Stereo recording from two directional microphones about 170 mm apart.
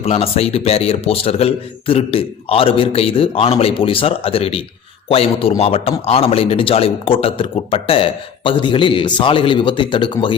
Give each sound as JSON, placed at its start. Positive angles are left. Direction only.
{"t": 0.0, "sound": "speech", "side_deg": 35}